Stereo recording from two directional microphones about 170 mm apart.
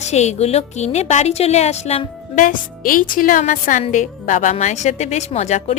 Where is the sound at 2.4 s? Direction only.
55° left (ahead or behind).